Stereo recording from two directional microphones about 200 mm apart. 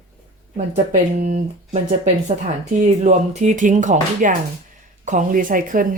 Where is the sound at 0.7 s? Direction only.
40° right (ahead or behind).